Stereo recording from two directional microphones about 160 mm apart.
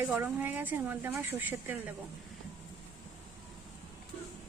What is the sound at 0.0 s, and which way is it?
A woman's voice, 10° right (ahead or behind).